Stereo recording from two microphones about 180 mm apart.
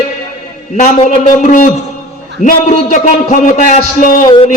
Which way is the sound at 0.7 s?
45° left (ahead or behind).